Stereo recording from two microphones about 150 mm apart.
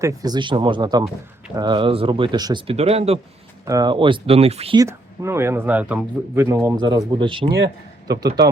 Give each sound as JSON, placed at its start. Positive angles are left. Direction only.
{"t": 0.0, "sound": "speech", "side_deg": -25}
{"t": 2.7, "sound": "speech", "side_deg": -45}
{"t": 3.7, "sound": "speech", "side_deg": -25}
{"t": 4.8, "sound": "speech", "side_deg": -20}
{"t": 6.7, "sound": "a man's voice", "side_deg": -30}